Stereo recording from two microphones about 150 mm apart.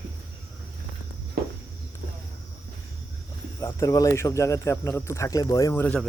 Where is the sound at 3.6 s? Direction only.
20° left (ahead or behind).